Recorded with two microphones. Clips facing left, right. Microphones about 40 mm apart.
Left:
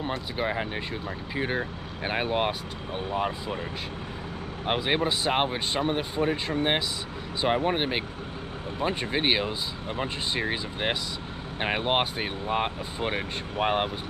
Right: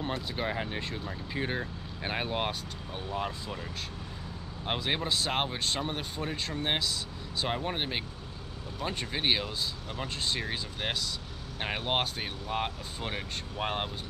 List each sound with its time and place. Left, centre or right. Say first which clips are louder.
0.0 s speech: left 4 dB; centre
4.6 s speech: left 5 dB; centre